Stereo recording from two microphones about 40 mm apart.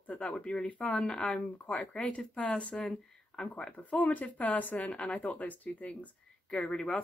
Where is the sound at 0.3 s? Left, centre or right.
Left.